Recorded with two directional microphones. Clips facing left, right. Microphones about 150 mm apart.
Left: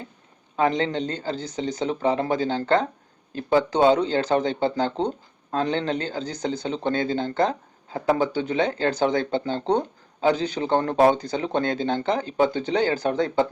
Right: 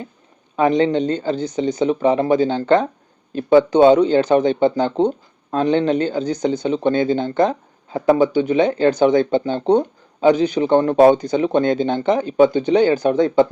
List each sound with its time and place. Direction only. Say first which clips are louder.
0.6 s speech: right 7 dB; 20° right (ahead or behind)